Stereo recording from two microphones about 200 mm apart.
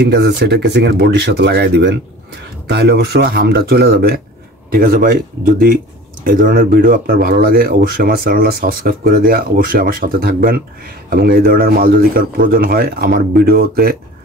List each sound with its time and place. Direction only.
0.0 s speech: 55° right (ahead or behind)